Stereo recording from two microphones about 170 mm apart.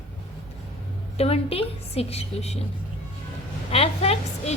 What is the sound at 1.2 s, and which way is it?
A woman's voice, 35° left (ahead or behind).